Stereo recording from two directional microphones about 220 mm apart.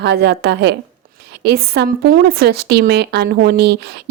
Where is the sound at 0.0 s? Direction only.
50° right (ahead or behind).